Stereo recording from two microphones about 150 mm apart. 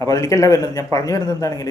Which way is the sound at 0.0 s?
20° left (ahead or behind).